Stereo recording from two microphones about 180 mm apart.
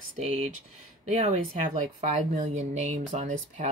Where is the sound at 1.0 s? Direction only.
35° right (ahead or behind).